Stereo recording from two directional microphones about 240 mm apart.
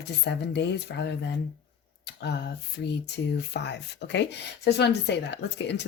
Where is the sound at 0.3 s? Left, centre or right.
Left.